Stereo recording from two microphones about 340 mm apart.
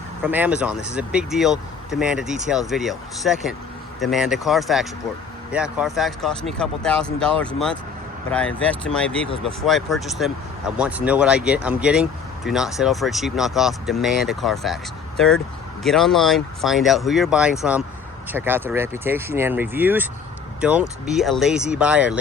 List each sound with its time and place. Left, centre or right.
0.2 s speech: centre
8.8 s speech: centre
15.8 s speech: centre